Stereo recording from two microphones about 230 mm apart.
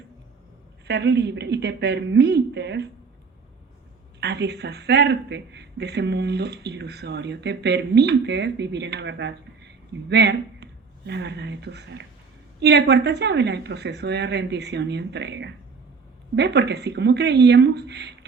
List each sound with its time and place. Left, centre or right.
0.9 s speech: right
4.2 s speech: right